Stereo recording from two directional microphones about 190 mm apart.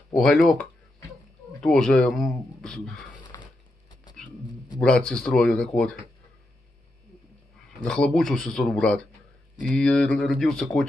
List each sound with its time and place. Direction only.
0.2 s speech: centre (ahead or behind)
3.3 s a sound: 15° left (ahead or behind)
4.7 s speech: 5° left (ahead or behind)
7.8 s speech: 5° left (ahead or behind)